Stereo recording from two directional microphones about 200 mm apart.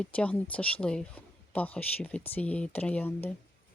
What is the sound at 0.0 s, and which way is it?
Speech, 5° left (ahead or behind).